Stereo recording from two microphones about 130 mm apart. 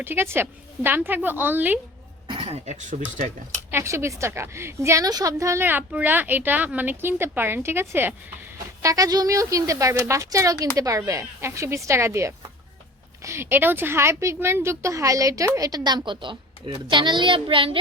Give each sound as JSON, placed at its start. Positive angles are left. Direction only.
{"t": 0.0, "sound": "a woman's voice", "side_deg": -15}
{"t": 2.2, "sound": "a sound", "side_deg": -45}
{"t": 2.6, "sound": "speech", "side_deg": -70}
{"t": 3.7, "sound": "a woman's voice", "side_deg": -20}